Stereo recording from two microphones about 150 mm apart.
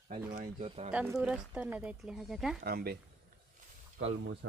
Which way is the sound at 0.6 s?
45° right (ahead or behind).